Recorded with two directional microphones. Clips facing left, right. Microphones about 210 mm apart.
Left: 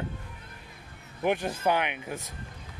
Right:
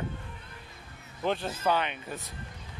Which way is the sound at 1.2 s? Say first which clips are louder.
Left 2 dB; 15° left (ahead or behind).